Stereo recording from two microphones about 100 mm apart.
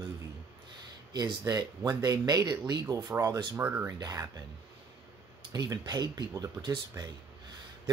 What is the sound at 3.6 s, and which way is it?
Speech, 20° right (ahead or behind).